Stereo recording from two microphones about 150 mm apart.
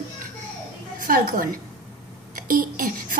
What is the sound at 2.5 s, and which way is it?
Speech, 65° right (ahead or behind).